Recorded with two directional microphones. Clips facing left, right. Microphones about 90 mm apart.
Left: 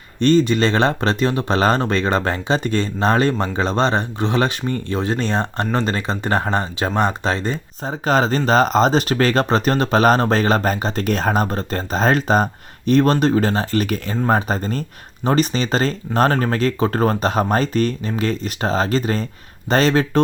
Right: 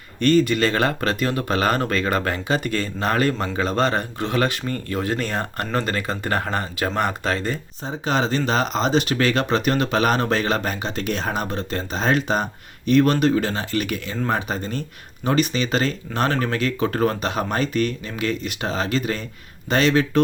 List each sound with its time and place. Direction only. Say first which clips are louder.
0.2 s speech: left 2 dB; 25° left (ahead or behind)
7.9 s speech: left 4 dB; 45° left (ahead or behind)